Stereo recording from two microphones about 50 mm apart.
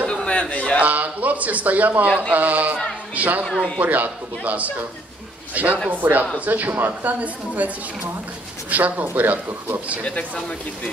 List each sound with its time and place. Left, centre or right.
0.0 s a sound: centre
0.7 s a man's voice: right
10.0 s speech: left